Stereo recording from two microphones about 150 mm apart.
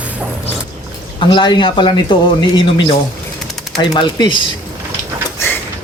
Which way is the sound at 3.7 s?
25° left (ahead or behind).